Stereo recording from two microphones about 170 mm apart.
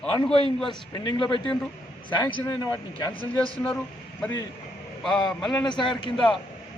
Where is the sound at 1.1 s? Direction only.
25° left (ahead or behind).